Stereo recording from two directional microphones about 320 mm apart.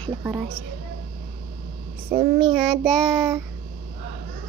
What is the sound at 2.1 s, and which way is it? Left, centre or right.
Child singing, centre.